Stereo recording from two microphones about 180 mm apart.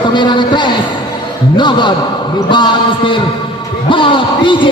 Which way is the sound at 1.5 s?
25° left (ahead or behind).